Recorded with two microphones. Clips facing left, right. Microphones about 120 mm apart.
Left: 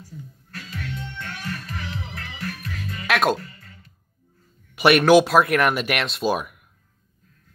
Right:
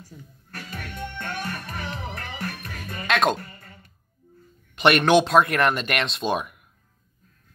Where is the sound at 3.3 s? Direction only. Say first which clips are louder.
Left 1 dB; 45° right (ahead or behind).